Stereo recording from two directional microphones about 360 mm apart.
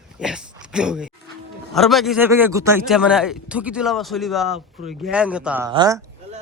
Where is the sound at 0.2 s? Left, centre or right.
Centre.